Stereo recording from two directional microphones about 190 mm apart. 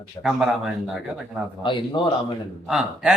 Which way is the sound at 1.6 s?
25° left (ahead or behind).